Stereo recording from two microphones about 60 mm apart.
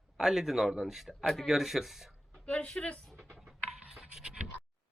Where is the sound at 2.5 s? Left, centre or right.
Centre.